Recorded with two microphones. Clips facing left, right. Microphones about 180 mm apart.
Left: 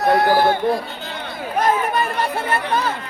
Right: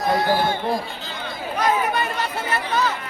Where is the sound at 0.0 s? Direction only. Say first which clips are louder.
Left 5 dB; 65° left (ahead or behind).